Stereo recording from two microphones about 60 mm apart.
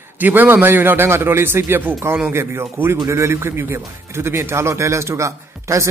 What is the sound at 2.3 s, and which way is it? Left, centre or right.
A man's voice, right.